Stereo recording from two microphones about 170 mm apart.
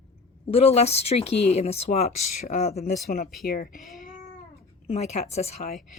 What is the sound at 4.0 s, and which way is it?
Cat, 55° left (ahead or behind).